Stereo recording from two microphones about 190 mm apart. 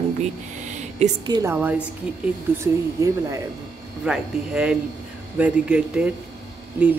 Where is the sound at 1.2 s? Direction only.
15° right (ahead or behind).